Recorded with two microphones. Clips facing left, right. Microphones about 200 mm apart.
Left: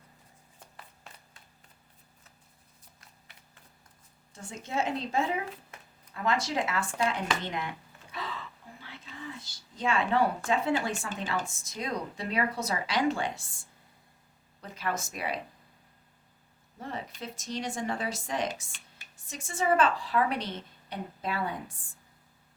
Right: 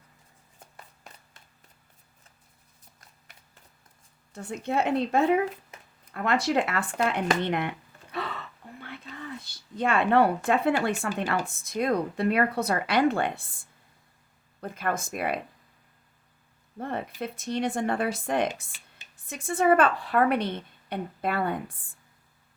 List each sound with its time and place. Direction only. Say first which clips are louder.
4.4 s a woman's voice: right 5 dB; 60° right (ahead or behind)
8.1 s a sound: right 5 dB; 60° right (ahead or behind)
8.6 s whispering: right 5 dB; 60° right (ahead or behind)
9.4 s a woman's voice: right 5 dB; 60° right (ahead or behind)
16.8 s a woman's voice: right 6 dB; 55° right (ahead or behind)